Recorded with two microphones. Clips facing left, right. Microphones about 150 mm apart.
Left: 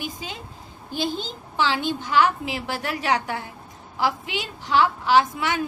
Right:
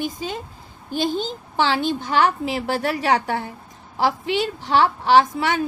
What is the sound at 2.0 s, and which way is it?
A woman's voice, 40° right (ahead or behind).